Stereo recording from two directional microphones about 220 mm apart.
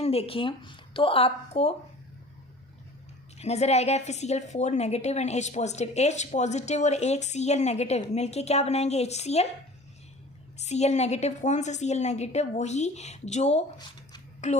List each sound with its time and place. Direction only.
0.0 s speech: 25° left (ahead or behind)
3.3 s a woman's voice: 30° left (ahead or behind)
10.6 s a woman's voice: 30° left (ahead or behind)